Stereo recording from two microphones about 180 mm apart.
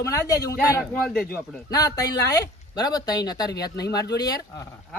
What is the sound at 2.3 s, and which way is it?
Speech, 20° left (ahead or behind).